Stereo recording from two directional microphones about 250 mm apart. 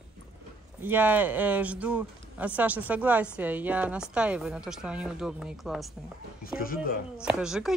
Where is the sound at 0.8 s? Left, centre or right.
Centre.